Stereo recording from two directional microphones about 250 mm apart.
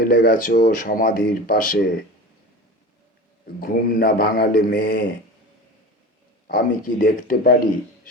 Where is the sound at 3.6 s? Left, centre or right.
Left.